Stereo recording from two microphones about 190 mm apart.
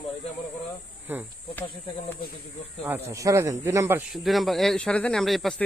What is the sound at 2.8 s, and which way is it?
Speech, 15° right (ahead or behind).